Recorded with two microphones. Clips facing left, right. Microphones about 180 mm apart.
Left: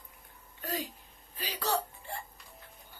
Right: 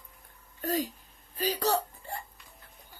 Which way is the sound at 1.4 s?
40° right (ahead or behind).